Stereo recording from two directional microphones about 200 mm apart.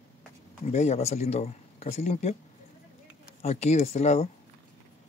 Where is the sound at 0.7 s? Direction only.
35° left (ahead or behind).